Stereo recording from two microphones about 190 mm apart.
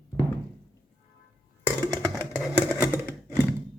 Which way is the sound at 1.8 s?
15° right (ahead or behind).